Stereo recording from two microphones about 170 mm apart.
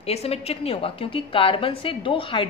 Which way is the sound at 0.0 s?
35° left (ahead or behind).